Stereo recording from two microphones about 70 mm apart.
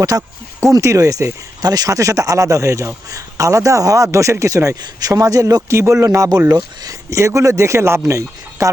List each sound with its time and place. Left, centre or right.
0.0 s a man's voice: right
0.7 s speech: right
1.6 s speech: right
4.8 s a man's voice: right
5.6 s a man's voice: right